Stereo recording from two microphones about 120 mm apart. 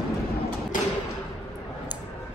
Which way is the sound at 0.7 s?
90° left.